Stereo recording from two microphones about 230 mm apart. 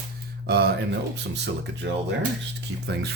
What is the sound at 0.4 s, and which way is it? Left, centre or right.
Speech, right.